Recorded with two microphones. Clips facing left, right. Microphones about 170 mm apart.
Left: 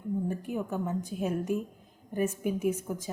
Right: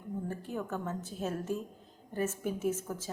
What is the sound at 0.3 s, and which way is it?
A woman's voice, 15° left (ahead or behind).